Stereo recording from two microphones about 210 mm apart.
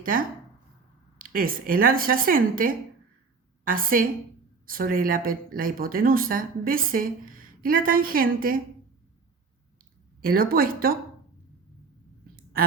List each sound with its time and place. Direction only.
0.0 s a woman's voice: 40° right (ahead or behind)
10.2 s speech: 45° right (ahead or behind)